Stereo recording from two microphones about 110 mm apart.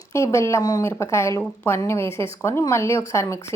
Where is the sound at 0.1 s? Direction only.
25° left (ahead or behind).